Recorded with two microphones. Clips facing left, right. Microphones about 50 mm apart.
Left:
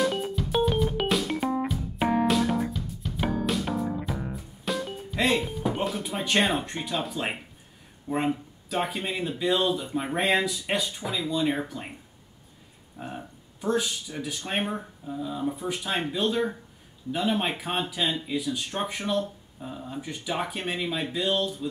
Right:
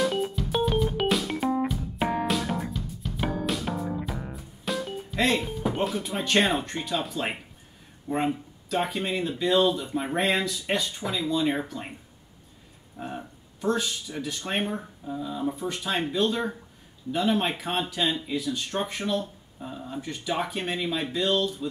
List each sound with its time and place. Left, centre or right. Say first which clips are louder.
0.0 s music: even; centre
5.6 s speech: right 1 dB; centre
12.9 s a sound: right 2 dB; centre
13.7 s speech: even; centre